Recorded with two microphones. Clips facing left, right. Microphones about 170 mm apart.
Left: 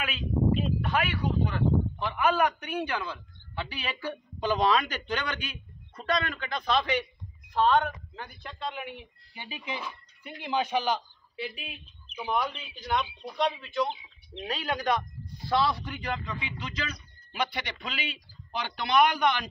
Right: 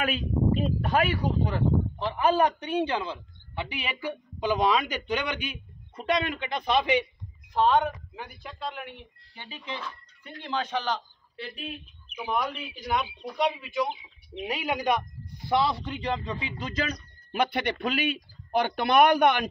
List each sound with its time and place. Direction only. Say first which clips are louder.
0.0 s a man's voice: right 2 dB; 45° right (ahead or behind)